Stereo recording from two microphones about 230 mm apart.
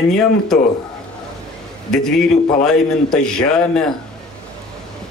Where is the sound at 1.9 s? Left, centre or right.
Centre.